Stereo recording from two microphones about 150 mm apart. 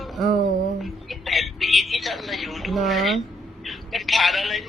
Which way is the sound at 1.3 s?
Centre (ahead or behind).